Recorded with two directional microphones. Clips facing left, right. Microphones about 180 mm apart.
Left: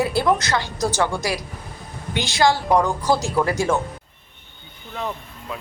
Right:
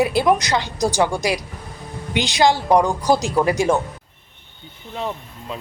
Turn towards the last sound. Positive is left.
turn(degrees=-25)  # may be behind; listen again after turning